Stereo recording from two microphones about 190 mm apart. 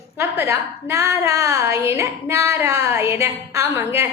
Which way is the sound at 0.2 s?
15° right (ahead or behind).